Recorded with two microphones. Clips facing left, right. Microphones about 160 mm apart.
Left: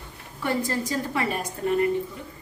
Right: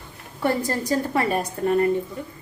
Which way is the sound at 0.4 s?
40° right (ahead or behind).